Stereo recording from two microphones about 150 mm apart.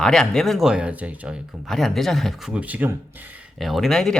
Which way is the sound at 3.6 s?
Centre (ahead or behind).